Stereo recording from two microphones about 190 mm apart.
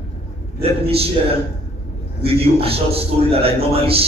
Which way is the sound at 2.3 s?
30° right (ahead or behind).